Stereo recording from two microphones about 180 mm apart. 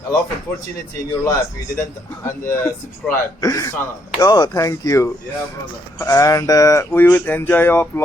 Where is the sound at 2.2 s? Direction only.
15° left (ahead or behind).